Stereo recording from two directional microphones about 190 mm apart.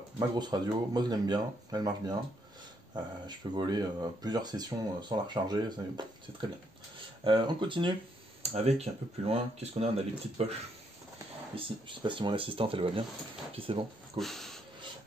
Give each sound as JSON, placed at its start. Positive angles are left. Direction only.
{"t": 0.4, "sound": "speech", "side_deg": -20}
{"t": 11.5, "sound": "speech", "side_deg": -25}
{"t": 14.1, "sound": "dog", "side_deg": 0}